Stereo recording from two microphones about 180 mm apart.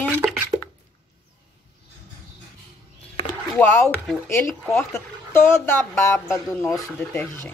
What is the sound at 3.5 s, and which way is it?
Speech, 5° left (ahead or behind).